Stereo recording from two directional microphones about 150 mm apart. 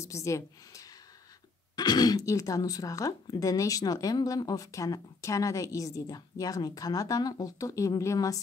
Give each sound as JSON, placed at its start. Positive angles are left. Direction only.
{"t": 0.0, "sound": "a woman's voice", "side_deg": 20}